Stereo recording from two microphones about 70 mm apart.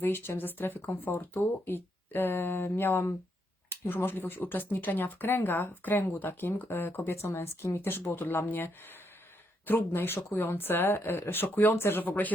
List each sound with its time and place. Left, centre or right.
0.0 s speech: left